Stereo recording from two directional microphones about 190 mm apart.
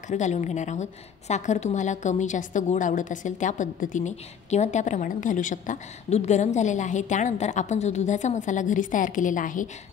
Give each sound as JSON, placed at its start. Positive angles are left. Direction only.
{"t": 0.1, "sound": "a woman's voice", "side_deg": 40}